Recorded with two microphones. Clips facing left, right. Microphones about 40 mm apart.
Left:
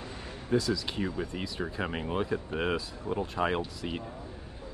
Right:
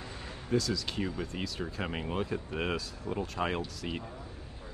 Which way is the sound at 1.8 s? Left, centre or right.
Centre.